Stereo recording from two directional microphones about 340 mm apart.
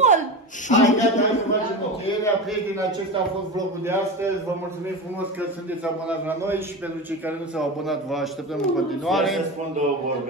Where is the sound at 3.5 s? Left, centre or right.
Centre.